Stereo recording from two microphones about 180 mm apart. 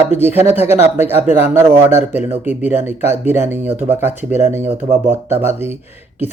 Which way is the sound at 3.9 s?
40° left (ahead or behind).